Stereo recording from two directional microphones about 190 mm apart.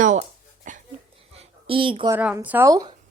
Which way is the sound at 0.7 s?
40° right (ahead or behind).